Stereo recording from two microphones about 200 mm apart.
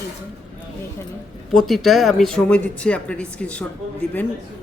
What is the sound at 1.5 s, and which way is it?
Speech, centre (ahead or behind).